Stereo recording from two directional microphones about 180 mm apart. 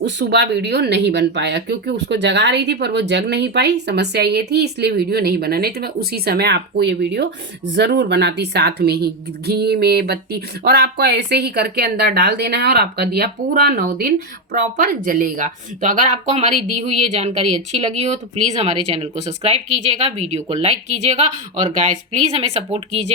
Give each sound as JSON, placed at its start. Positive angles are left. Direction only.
{"t": 0.0, "sound": "speech", "side_deg": -75}